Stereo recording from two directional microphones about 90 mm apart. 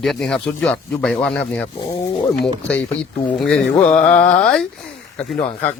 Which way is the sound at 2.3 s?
5° left (ahead or behind).